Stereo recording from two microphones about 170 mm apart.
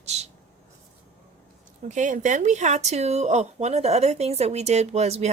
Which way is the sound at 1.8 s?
45° right (ahead or behind).